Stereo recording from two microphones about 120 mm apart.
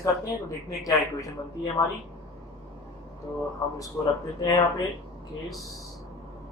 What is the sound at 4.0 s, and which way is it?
Speech, 10° left (ahead or behind).